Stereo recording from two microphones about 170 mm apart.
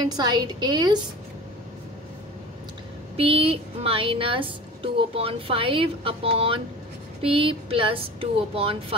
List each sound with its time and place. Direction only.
0.0 s a woman's voice: 25° right (ahead or behind)
3.2 s a woman's voice: 35° right (ahead or behind)